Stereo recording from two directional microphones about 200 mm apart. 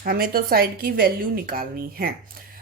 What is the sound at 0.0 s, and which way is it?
A woman's voice, 50° right (ahead or behind).